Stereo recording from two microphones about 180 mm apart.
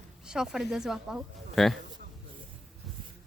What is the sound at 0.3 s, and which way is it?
Speech, 5° right (ahead or behind).